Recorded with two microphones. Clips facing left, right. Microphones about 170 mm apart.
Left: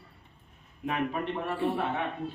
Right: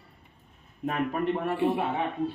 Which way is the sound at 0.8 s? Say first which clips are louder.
Right 3 dB; 45° right (ahead or behind).